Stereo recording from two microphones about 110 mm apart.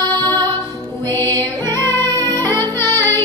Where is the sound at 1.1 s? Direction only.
20° left (ahead or behind).